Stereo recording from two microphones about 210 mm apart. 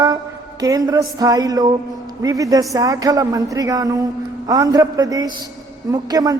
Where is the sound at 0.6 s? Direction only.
15° right (ahead or behind).